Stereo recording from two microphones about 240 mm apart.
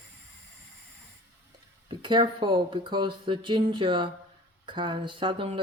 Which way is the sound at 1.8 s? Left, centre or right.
Centre.